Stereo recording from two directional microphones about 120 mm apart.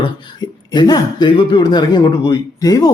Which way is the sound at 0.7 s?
35° left (ahead or behind).